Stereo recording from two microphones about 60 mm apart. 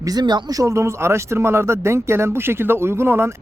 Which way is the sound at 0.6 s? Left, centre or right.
Right.